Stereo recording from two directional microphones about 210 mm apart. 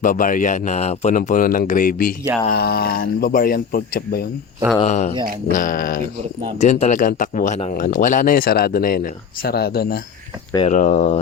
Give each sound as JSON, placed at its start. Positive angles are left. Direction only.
{"t": 0.0, "sound": "speech", "side_deg": 40}
{"t": 4.8, "sound": "speech", "side_deg": 30}
{"t": 10.7, "sound": "speech", "side_deg": 35}